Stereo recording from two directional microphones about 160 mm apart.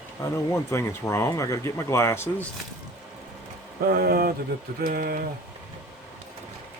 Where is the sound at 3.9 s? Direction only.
70° right (ahead or behind).